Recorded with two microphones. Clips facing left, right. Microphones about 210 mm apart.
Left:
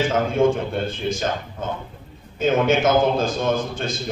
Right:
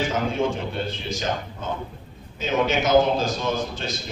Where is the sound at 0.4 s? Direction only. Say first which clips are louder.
Left 6 dB; 50° left (ahead or behind).